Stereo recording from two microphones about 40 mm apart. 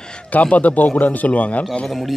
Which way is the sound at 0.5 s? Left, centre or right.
Left.